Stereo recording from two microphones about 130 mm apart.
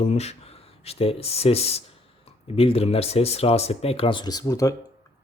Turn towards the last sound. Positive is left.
turn(degrees=25)  # may be behind; listen again after turning